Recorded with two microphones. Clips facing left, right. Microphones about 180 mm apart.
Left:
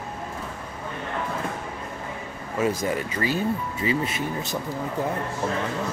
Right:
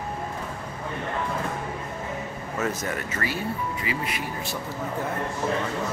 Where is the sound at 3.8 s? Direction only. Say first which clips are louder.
Left 5 dB; 25° left (ahead or behind).